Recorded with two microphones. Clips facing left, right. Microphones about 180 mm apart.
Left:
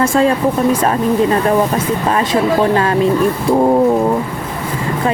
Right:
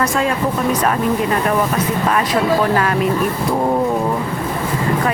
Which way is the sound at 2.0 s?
25° left (ahead or behind).